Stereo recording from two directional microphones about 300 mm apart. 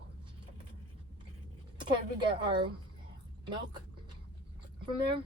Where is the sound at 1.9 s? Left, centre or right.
Centre.